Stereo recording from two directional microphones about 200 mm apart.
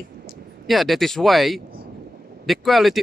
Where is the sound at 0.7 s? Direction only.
Centre (ahead or behind).